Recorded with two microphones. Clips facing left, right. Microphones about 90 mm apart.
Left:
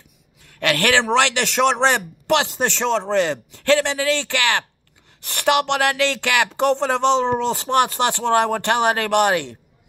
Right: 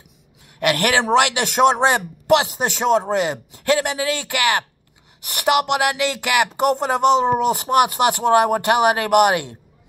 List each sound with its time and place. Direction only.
0.5 s a man's voice: 20° right (ahead or behind)